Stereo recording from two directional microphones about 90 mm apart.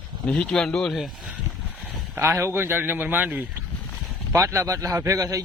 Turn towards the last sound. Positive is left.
turn(degrees=-40)  # may be behind; listen again after turning